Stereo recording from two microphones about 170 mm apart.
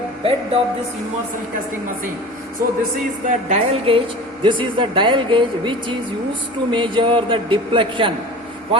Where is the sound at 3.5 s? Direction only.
35° right (ahead or behind).